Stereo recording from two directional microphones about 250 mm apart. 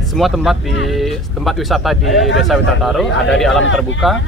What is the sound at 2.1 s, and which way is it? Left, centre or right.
Speech, left.